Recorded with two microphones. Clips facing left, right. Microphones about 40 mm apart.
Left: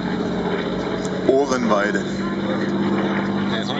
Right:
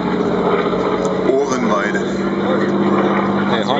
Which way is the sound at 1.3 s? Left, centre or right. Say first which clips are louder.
Right 2 dB; right.